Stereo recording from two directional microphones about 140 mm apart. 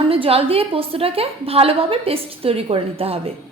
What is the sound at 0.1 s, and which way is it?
A woman's voice, 45° right (ahead or behind).